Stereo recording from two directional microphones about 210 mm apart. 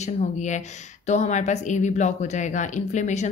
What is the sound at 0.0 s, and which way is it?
Speech, 35° left (ahead or behind).